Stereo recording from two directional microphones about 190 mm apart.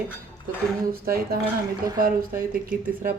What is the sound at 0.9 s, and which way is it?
Speech, 50° right (ahead or behind).